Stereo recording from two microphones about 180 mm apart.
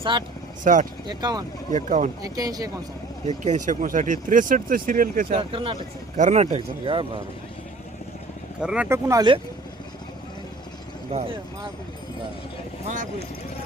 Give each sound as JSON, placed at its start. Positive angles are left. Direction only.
{"t": 0.0, "sound": "speech", "side_deg": -25}
{"t": 0.6, "sound": "speech", "side_deg": -45}
{"t": 1.0, "sound": "speech", "side_deg": -20}
{"t": 1.7, "sound": "speech", "side_deg": -40}
{"t": 2.2, "sound": "speech", "side_deg": -20}
{"t": 3.2, "sound": "speech", "side_deg": -40}
{"t": 5.4, "sound": "speech", "side_deg": -30}
{"t": 8.6, "sound": "speech", "side_deg": -5}